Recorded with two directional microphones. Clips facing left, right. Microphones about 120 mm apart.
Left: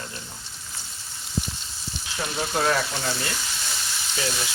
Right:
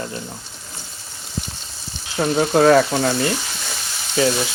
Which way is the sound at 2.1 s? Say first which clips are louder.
Right 11 dB; 50° right (ahead or behind).